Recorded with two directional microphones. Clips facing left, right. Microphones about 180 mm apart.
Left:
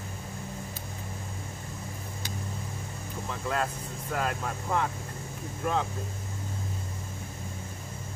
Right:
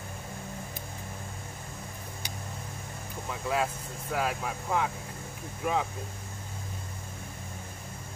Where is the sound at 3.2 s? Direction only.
5° right (ahead or behind).